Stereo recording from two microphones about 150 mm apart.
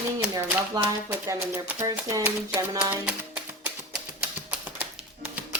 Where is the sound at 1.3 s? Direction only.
15° right (ahead or behind).